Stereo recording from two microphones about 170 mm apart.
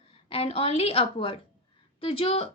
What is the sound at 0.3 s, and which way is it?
A woman's voice, 35° left (ahead or behind).